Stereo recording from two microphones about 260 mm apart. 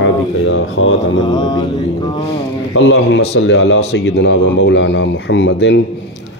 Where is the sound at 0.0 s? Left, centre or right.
Left.